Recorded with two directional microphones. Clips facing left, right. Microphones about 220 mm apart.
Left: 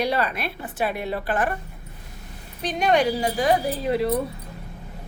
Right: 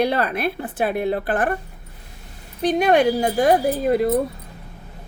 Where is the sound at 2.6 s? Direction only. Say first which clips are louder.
Right 5 dB; 55° right (ahead or behind).